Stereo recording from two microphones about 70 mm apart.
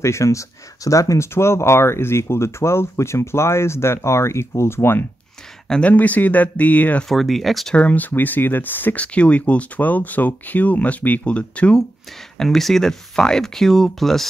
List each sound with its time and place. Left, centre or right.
0.0 s speech: left
5.7 s speech: centre
7.1 s speech: centre
7.7 s speech: left
12.4 s speech: centre